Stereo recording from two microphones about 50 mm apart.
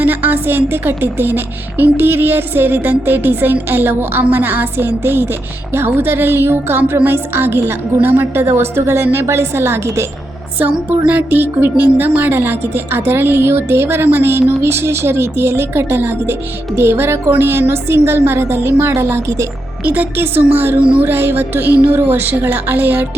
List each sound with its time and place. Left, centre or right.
0.0 s speech: right
4.2 s a woman's voice: right
11.3 s speech: right
19.8 s speech: right
20.7 s music: right
21.0 s speech: right